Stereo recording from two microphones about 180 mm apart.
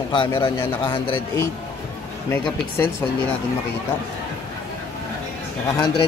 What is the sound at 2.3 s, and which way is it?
Speech, 15° left (ahead or behind).